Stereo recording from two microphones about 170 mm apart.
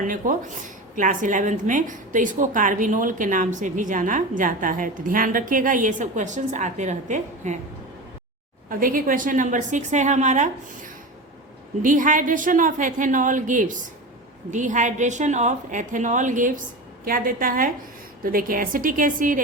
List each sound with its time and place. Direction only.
0.0 s a woman's voice: 50° right (ahead or behind)
8.7 s a woman's voice: 55° right (ahead or behind)